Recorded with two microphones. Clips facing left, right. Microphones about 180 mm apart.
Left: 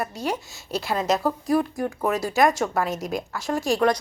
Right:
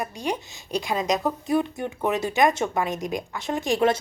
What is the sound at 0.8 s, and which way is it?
Speech, 5° left (ahead or behind).